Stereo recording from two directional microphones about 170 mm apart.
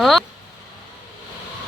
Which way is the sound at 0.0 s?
Centre (ahead or behind).